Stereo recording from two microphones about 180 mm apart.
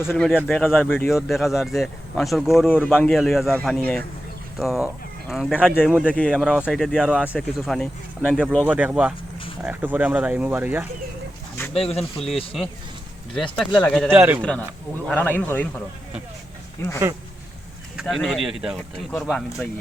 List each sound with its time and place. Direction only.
0.1 s speech: centre (ahead or behind)
0.6 s a man's voice: 10° left (ahead or behind)
1.1 s speech: centre (ahead or behind)
6.1 s a man's voice: 5° left (ahead or behind)
6.3 s speech: 5° right (ahead or behind)
8.6 s speech: 10° right (ahead or behind)
11.7 s speech: 35° left (ahead or behind)
13.7 s speech: 5° left (ahead or behind)
14.1 s speech: 10° right (ahead or behind)
15.0 s a man's voice: 10° left (ahead or behind)
16.8 s a man's voice: 15° left (ahead or behind)
18.0 s speech: 5° left (ahead or behind)